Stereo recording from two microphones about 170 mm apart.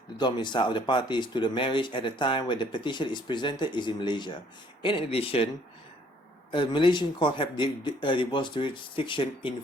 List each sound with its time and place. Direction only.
0.2 s speech: 25° left (ahead or behind)
6.5 s speech: 30° left (ahead or behind)